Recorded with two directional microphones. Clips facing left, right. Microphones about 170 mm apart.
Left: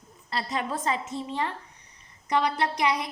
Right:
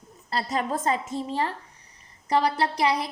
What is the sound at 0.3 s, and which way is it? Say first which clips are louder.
A woman's voice: right 3 dB; 40° right (ahead or behind).